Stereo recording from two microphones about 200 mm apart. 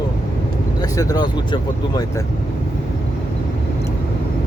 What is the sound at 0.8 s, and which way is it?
Speech, 20° left (ahead or behind).